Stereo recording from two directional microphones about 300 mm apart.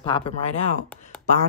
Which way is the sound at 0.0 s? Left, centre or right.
Centre.